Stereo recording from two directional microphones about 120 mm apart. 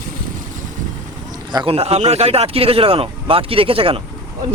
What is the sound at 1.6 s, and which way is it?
Speech, 60° right (ahead or behind).